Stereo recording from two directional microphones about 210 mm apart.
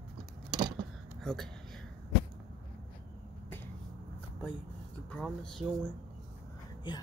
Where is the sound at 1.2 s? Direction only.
Centre (ahead or behind).